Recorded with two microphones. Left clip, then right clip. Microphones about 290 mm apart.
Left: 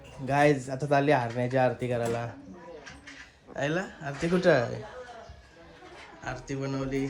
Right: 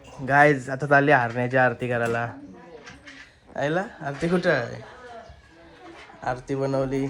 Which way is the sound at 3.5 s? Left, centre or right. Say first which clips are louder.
Right 5 dB; centre.